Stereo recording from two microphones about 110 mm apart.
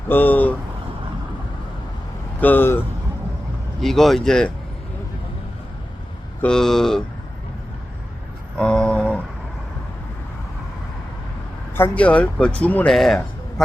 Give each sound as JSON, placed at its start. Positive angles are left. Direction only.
{"t": 0.1, "sound": "speech", "side_deg": 15}
{"t": 2.4, "sound": "speech", "side_deg": 15}
{"t": 3.8, "sound": "speech", "side_deg": 0}
{"t": 6.4, "sound": "speech", "side_deg": 5}
{"t": 8.5, "sound": "a sound", "side_deg": 5}
{"t": 11.7, "sound": "speech", "side_deg": 15}